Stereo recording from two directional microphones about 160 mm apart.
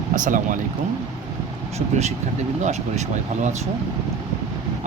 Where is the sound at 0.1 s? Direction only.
55° right (ahead or behind).